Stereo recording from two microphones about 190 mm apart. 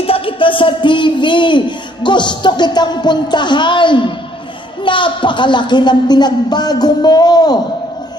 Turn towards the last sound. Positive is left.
turn(degrees=20)  # may be behind; listen again after turning